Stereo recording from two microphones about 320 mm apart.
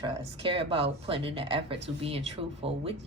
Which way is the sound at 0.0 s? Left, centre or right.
Centre.